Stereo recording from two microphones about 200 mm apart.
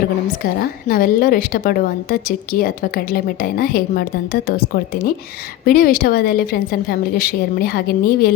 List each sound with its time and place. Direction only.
0.4 s a woman's voice: 45° left (ahead or behind)